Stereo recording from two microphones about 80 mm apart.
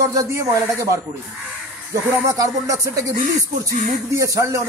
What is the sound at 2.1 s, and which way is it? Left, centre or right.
A man's voice, right.